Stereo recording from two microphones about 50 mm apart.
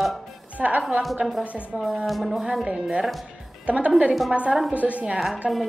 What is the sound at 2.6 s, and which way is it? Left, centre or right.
A woman's voice, right.